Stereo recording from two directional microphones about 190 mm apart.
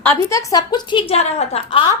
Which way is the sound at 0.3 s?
15° left (ahead or behind).